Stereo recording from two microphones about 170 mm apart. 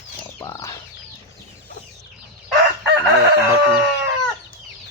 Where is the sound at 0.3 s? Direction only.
15° left (ahead or behind).